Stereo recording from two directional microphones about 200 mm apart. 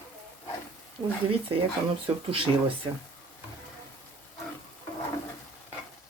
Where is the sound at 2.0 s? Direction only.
25° right (ahead or behind).